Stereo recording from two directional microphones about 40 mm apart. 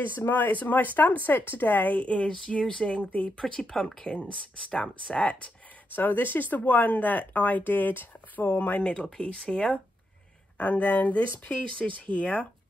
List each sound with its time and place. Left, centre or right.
0.3 s speech: left
0.6 s speech: left
1.9 s speech: left
2.6 s speech: centre
2.9 s speech: left
3.4 s speech: left
5.9 s speech: left
9.2 s speech: left
10.6 s speech: left
11.8 s speech: left
12.2 s speech: left